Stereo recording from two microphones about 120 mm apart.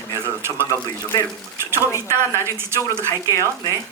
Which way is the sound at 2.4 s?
20° right (ahead or behind).